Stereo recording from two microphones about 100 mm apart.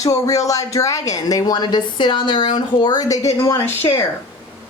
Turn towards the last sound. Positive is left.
turn(degrees=25)  # may be behind; listen again after turning